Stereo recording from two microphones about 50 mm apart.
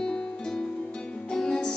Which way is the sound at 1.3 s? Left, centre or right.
Centre.